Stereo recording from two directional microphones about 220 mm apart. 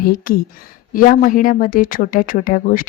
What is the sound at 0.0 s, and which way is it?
Speech, 40° left (ahead or behind).